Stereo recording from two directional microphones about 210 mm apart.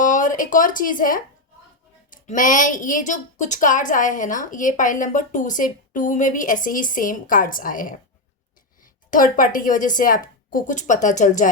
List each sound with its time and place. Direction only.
0.0 s a woman's voice: 35° left (ahead or behind)